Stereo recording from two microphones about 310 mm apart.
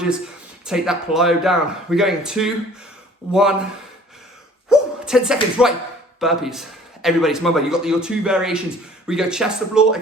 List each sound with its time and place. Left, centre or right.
0.6 s a man's voice: centre
4.7 s a man's voice: centre